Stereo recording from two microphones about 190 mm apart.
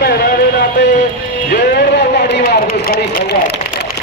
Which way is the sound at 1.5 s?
60° left (ahead or behind).